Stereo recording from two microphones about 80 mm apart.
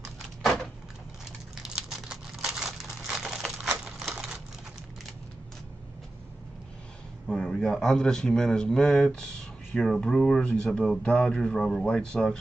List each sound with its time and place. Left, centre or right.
0.0 s a sound: centre
1.6 s crumpling: centre
7.2 s a man's voice: centre